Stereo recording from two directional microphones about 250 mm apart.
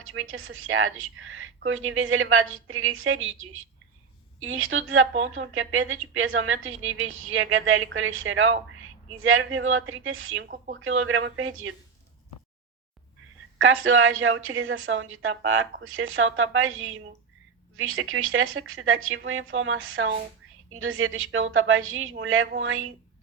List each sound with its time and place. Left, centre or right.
0.1 s a woman's voice: right
4.4 s a woman's voice: right
13.8 s a woman's voice: right